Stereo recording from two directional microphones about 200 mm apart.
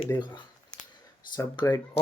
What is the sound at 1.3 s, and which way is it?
Speech, 20° left (ahead or behind).